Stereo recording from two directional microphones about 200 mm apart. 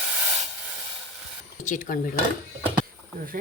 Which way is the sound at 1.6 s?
40° left (ahead or behind).